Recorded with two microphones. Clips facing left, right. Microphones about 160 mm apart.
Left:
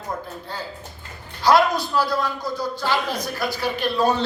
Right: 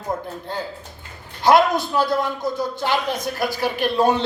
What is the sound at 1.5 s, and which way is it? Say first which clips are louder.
Speech: right 2 dB; 20° right (ahead or behind).